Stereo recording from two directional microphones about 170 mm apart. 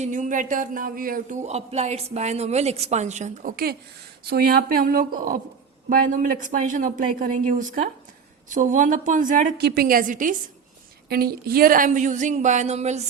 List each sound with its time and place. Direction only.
0.0 s speech: 50° right (ahead or behind)
11.1 s speech: 65° right (ahead or behind); by 13.1 s 40° right (ahead or behind)